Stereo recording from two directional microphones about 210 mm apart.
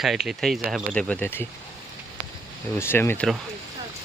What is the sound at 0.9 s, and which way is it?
Speech, 5° left (ahead or behind).